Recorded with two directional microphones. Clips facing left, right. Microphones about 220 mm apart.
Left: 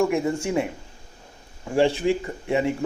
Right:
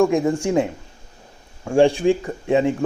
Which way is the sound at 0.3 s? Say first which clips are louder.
Right 5 dB; 15° right (ahead or behind).